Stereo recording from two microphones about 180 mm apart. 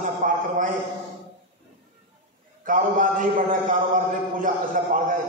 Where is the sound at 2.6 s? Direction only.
50° right (ahead or behind).